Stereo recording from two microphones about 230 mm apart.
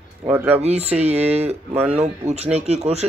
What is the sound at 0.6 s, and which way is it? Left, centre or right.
Speech, right.